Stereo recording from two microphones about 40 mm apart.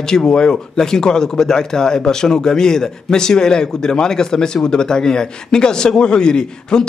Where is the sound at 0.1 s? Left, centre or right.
Centre.